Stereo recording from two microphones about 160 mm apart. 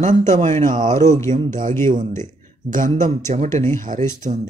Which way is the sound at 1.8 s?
55° right (ahead or behind).